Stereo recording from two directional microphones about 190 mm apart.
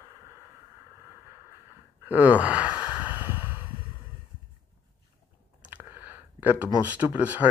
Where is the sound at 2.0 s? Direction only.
10° right (ahead or behind).